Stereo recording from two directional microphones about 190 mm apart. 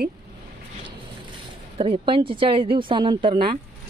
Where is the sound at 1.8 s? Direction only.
30° right (ahead or behind).